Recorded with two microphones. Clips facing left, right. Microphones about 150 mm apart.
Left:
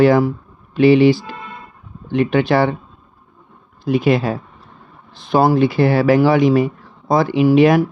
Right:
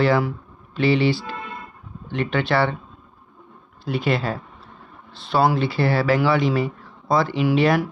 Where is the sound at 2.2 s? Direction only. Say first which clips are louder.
Left 5 dB; 45° left (ahead or behind).